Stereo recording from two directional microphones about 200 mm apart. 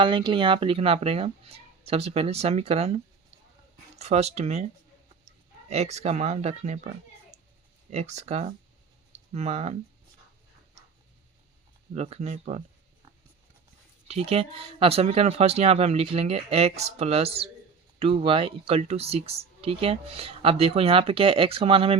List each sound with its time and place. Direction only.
0.0 s speech: 25° right (ahead or behind)
5.6 s speech: 30° right (ahead or behind)
7.3 s cat: 35° right (ahead or behind)
7.9 s speech: 35° right (ahead or behind)
11.9 s speech: 30° right (ahead or behind)
14.1 s speech: 30° right (ahead or behind)